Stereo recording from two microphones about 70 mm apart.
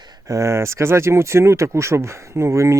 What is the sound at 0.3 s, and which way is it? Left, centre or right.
Speech, right.